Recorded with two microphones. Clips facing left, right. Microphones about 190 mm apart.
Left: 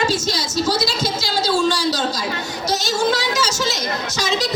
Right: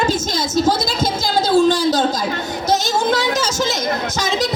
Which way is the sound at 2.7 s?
50° right (ahead or behind).